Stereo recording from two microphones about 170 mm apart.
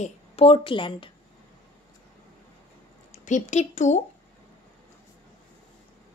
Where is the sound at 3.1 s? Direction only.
45° left (ahead or behind).